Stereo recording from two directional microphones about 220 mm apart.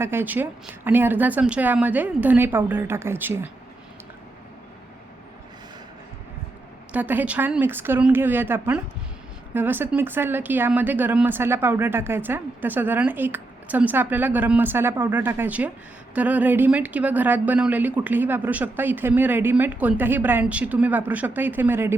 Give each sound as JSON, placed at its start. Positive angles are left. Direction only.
{"t": 0.0, "sound": "speech", "side_deg": -10}
{"t": 6.9, "sound": "speech", "side_deg": -10}